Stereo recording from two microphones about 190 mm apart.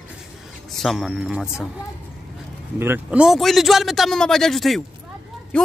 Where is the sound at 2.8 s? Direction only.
10° right (ahead or behind).